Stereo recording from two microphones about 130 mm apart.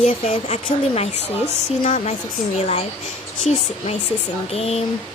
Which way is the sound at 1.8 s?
70° left (ahead or behind).